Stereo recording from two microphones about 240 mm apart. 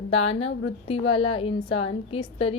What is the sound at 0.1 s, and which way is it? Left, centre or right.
A woman's voice, left.